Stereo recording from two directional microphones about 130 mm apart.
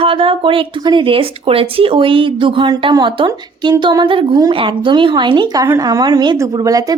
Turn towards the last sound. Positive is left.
turn(degrees=-30)  # may be behind; listen again after turning